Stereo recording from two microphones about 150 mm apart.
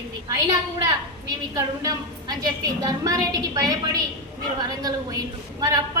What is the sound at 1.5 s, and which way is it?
A woman's voice, 25° right (ahead or behind).